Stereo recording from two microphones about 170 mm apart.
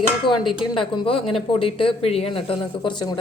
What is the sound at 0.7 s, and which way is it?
Speech, 30° left (ahead or behind).